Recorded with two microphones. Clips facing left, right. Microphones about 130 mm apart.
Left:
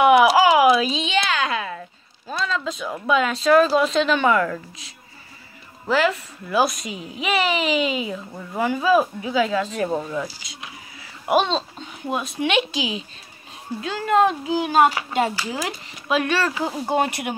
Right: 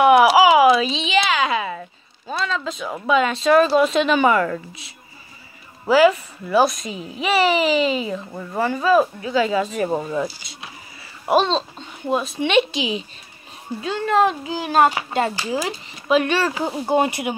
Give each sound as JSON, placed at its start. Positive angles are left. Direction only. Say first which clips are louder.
{"t": 0.0, "sound": "a sound", "louder": "right 2 dB", "side_deg": 0}
{"t": 5.9, "sound": "speech", "louder": "right 6 dB", "side_deg": -10}
{"t": 9.4, "sound": "speech", "louder": "right 2 dB", "side_deg": -5}
{"t": 10.4, "sound": "a sound", "louder": "even", "side_deg": 0}
{"t": 11.3, "sound": "speech", "louder": "right 2 dB", "side_deg": 10}
{"t": 14.9, "sound": "speech", "louder": "right 1 dB", "side_deg": -20}
{"t": 15.5, "sound": "speech", "louder": "right 4 dB", "side_deg": 0}